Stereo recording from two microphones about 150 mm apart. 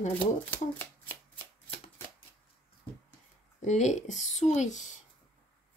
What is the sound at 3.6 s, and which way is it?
Speech, 50° left (ahead or behind).